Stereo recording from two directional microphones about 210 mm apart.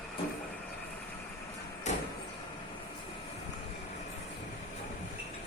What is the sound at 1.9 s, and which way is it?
Vehicle, 35° left (ahead or behind).